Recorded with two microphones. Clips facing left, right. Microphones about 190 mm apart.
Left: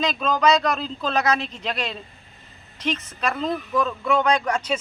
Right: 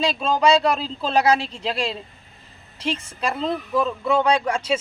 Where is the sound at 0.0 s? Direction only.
30° right (ahead or behind).